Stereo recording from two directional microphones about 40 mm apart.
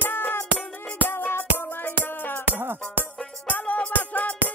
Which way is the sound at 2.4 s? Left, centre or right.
Right.